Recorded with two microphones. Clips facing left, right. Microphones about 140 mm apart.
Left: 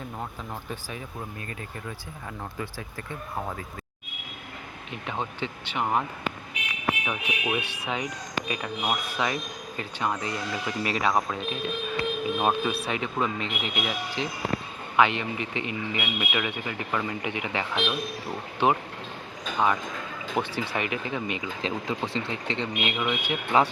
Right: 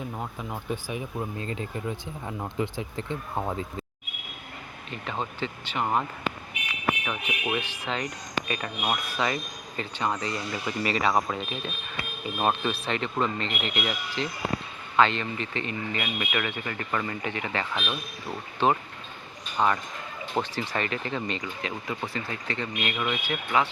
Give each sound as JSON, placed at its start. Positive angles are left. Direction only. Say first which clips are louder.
{"t": 0.7, "sound": "speech", "louder": "right 5 dB", "side_deg": -15}
{"t": 4.9, "sound": "speech", "louder": "even", "side_deg": 5}
{"t": 21.6, "sound": "speech", "louder": "left 3 dB", "side_deg": 25}